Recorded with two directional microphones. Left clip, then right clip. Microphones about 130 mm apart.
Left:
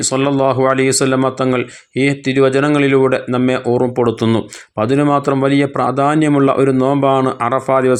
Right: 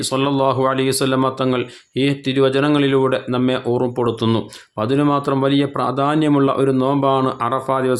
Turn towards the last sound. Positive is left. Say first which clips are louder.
# left 5 dB
turn(degrees=25)  # may be behind; listen again after turning